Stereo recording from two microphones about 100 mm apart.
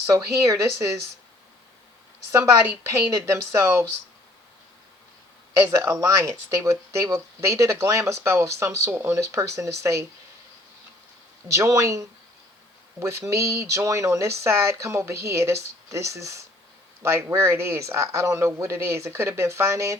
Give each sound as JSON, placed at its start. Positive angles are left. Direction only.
{"t": 0.0, "sound": "speech", "side_deg": -30}
{"t": 2.3, "sound": "speech", "side_deg": -20}
{"t": 3.1, "sound": "speech", "side_deg": -30}
{"t": 5.7, "sound": "speech", "side_deg": -30}
{"t": 11.4, "sound": "speech", "side_deg": -30}